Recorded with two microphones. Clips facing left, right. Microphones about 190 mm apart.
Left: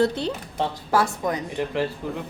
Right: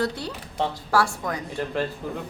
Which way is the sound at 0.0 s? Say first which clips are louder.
Left 5 dB; 25° left (ahead or behind).